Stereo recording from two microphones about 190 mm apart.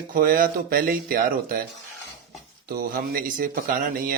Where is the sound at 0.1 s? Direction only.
50° right (ahead or behind).